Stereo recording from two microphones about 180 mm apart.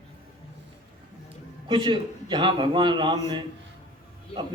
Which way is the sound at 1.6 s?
30° right (ahead or behind).